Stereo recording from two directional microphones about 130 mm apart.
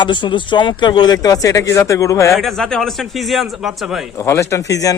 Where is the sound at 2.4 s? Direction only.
Centre (ahead or behind).